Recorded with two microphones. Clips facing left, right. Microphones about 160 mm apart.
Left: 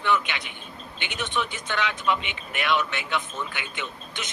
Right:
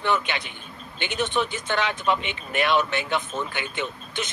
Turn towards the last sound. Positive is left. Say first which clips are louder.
# right 5 dB
turn(degrees=-30)  # may be behind; listen again after turning